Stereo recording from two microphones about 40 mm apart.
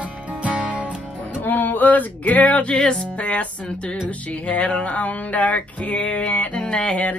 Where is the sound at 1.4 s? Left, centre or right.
Left.